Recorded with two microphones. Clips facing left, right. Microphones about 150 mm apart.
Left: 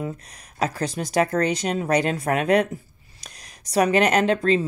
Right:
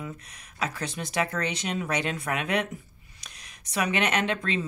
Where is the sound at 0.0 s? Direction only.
40° left (ahead or behind).